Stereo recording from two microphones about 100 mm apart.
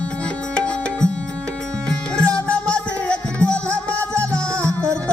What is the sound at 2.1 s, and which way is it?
Music, 10° left (ahead or behind).